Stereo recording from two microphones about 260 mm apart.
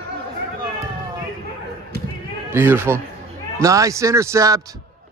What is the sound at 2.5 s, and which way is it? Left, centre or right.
A man's voice, centre.